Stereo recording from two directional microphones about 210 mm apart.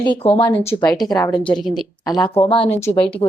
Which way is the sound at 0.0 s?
25° left (ahead or behind).